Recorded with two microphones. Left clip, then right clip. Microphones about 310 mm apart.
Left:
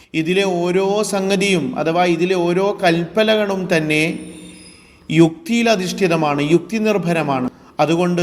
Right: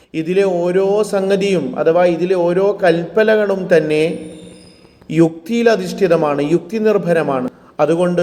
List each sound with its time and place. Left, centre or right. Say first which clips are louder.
0.1 s a man's voice: right 2 dB; centre